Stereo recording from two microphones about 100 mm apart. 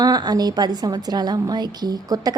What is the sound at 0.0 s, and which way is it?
A woman's voice, 45° right (ahead or behind).